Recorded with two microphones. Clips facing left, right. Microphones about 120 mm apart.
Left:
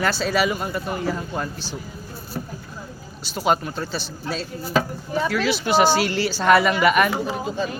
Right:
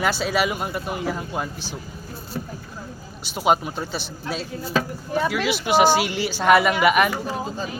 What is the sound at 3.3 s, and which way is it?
Speech, 15° right (ahead or behind).